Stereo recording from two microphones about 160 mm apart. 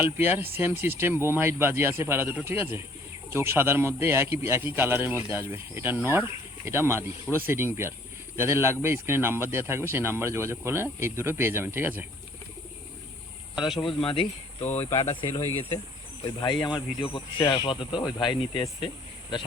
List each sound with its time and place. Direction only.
0.0 s a man's voice: 10° right (ahead or behind)
13.8 s speech: 35° left (ahead or behind)
16.2 s speech: 30° left (ahead or behind)